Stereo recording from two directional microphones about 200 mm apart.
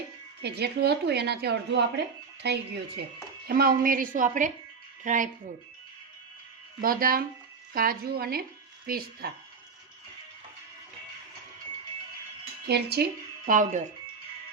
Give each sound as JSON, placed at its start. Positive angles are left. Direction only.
{"t": 0.4, "sound": "a woman's voice", "side_deg": -55}
{"t": 6.8, "sound": "a woman's voice", "side_deg": -45}
{"t": 12.6, "sound": "a woman's voice", "side_deg": -55}